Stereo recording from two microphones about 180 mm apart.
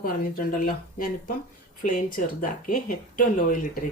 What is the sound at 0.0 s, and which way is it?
Speech, 50° left (ahead or behind).